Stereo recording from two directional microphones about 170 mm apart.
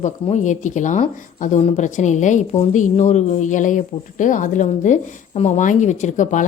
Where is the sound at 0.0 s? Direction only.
45° left (ahead or behind).